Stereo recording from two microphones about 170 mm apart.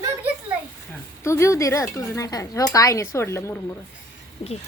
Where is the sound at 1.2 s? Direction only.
15° left (ahead or behind).